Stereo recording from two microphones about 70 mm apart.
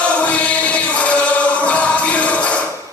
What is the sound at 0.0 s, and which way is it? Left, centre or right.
Chant, centre.